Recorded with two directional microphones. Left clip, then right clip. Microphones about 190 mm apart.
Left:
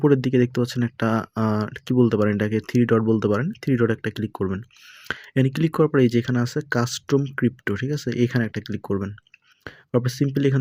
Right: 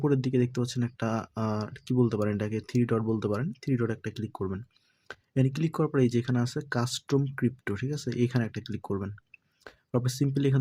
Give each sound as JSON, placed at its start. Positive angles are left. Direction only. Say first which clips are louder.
{"t": 0.0, "sound": "speech", "louder": "left 8 dB", "side_deg": 25}